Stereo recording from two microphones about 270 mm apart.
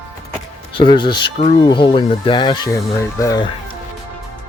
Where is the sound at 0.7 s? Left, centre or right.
Centre.